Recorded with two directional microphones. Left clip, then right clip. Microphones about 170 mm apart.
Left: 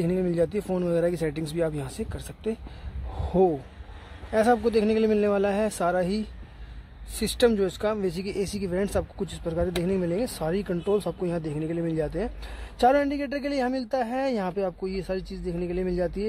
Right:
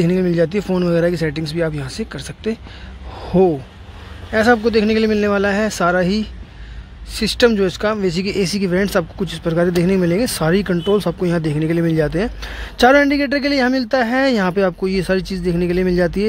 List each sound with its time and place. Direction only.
0.0 s speech: 5° right (ahead or behind)